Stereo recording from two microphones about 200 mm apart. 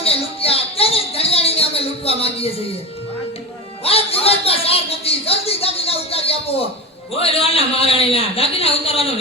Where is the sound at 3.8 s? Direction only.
30° left (ahead or behind).